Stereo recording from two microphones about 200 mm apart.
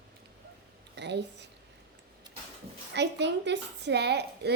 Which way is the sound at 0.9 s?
60° right (ahead or behind).